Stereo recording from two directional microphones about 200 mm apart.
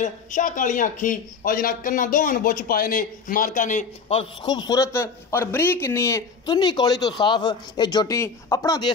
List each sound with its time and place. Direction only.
0.0 s a man's voice: 40° left (ahead or behind); by 8.9 s 20° left (ahead or behind)